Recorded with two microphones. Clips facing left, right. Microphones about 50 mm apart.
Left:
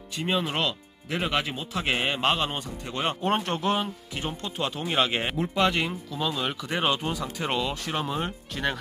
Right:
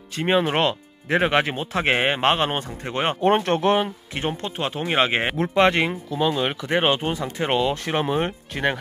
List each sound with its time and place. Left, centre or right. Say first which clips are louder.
0.2 s speech: right 7 dB; right